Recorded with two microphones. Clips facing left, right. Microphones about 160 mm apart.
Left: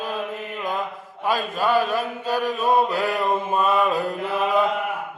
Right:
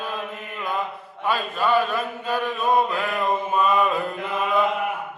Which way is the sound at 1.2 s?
40° left (ahead or behind).